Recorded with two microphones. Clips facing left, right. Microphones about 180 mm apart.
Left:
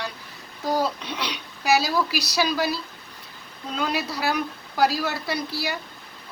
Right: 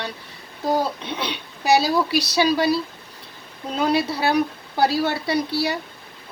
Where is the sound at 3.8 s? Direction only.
30° right (ahead or behind).